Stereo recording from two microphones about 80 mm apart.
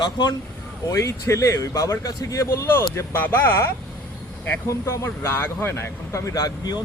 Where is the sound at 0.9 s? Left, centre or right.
Left.